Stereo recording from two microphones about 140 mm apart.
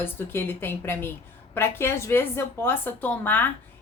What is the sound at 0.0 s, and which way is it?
A woman's voice, 15° left (ahead or behind).